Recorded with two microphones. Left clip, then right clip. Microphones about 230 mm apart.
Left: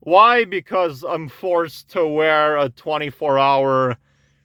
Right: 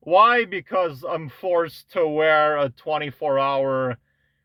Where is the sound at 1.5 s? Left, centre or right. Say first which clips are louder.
Left 2 dB; left.